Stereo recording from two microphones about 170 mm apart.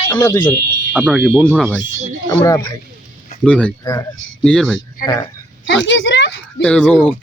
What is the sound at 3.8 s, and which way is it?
Speech, 20° left (ahead or behind).